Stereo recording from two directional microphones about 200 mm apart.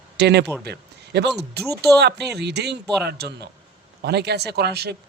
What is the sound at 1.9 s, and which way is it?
Speech, 55° right (ahead or behind).